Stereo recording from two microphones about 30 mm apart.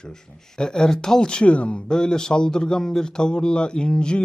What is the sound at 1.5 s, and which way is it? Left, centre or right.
Speech, left.